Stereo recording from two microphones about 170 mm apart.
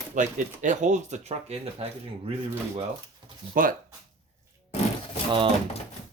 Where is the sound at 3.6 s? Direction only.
55° right (ahead or behind).